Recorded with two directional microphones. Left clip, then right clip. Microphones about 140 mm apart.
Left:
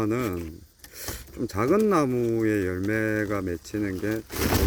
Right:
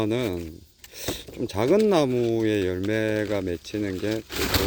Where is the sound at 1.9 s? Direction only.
15° right (ahead or behind).